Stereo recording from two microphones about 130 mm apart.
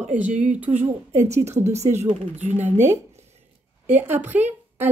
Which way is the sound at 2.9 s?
60° right (ahead or behind).